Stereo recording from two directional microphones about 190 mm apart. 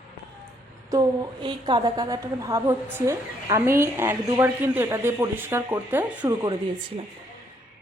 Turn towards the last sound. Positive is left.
turn(degrees=-25)  # may be behind; listen again after turning